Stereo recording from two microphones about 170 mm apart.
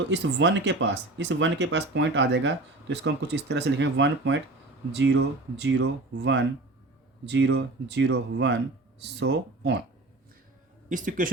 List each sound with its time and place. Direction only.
0.1 s speech: 90° right
10.8 s speech: 50° right (ahead or behind)